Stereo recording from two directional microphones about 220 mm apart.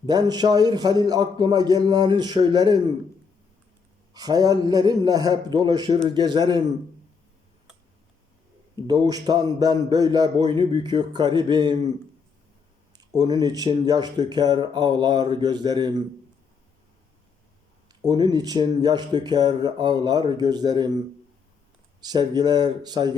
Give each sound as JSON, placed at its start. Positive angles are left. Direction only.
{"t": 0.0, "sound": "speech", "side_deg": -20}
{"t": 4.1, "sound": "a man's voice", "side_deg": -15}
{"t": 8.7, "sound": "a man's voice", "side_deg": -15}
{"t": 13.0, "sound": "speech", "side_deg": -20}
{"t": 17.8, "sound": "speech", "side_deg": -20}
{"t": 22.0, "sound": "speech", "side_deg": -20}